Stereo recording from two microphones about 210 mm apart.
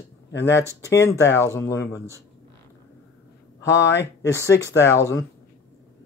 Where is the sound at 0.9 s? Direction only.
15° left (ahead or behind).